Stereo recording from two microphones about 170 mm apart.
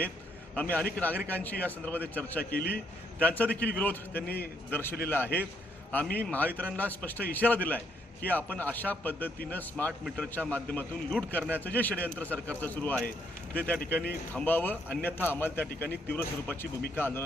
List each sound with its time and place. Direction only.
0.5 s a man's voice: 10° left (ahead or behind)
2.4 s a man's voice: 65° left (ahead or behind)
3.2 s a man's voice: 10° left (ahead or behind)